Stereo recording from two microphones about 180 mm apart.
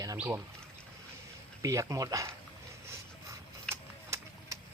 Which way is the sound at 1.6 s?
15° right (ahead or behind).